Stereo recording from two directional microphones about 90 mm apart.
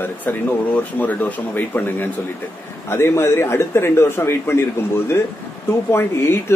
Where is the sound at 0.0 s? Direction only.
20° left (ahead or behind).